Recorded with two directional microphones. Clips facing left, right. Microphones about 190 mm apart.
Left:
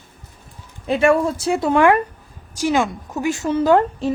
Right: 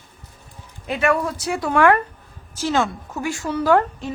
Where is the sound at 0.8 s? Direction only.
30° left (ahead or behind).